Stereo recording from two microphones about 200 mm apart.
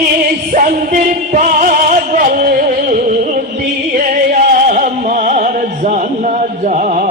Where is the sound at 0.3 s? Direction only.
45° right (ahead or behind).